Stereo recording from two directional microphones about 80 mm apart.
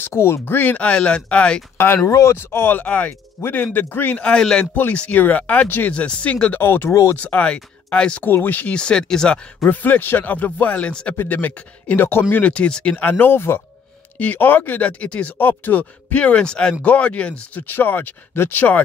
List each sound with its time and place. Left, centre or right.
0.0 s speech: left; by 1.6 s centre
2.0 s speech: left; by 3.1 s centre
3.1 s speech: left
6.6 s speech: left; by 9.7 s centre
9.7 s speech: left
13.2 s speech: left